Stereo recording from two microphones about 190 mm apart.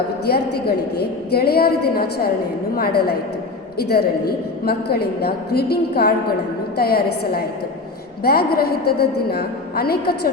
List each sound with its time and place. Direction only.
0.3 s a woman's voice: 55° left (ahead or behind)